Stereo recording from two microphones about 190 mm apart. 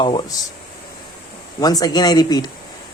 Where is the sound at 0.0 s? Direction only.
25° left (ahead or behind).